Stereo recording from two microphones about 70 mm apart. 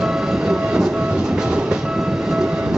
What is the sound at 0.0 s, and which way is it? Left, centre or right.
Train, centre.